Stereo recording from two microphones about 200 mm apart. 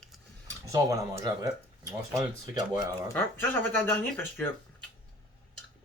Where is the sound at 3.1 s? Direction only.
10° left (ahead or behind).